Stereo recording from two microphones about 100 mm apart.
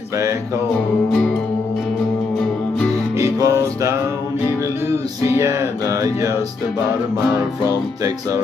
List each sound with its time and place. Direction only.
3.2 s music: 30° right (ahead or behind)
5.2 s music: 30° right (ahead or behind)